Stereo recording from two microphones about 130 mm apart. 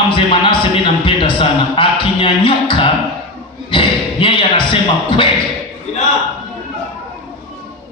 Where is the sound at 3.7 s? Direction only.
40° left (ahead or behind).